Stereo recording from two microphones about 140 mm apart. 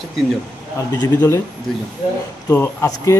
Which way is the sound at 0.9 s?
25° left (ahead or behind).